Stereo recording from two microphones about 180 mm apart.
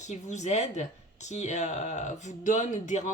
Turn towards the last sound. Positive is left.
turn(degrees=40)  # may be behind; listen again after turning